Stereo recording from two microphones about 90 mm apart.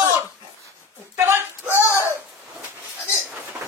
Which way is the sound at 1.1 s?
30° right (ahead or behind).